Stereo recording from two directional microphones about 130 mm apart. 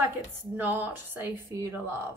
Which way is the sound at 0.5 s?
15° right (ahead or behind).